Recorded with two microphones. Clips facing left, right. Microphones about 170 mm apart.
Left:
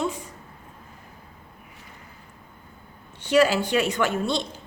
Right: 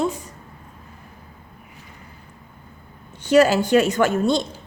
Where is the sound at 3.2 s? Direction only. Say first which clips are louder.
Right 4 dB; 45° right (ahead or behind).